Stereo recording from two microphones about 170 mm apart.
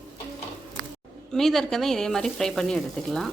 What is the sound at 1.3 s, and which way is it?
Speech, centre (ahead or behind).